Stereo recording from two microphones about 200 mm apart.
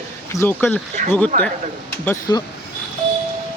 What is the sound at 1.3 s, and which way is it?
Speech, 40° right (ahead or behind).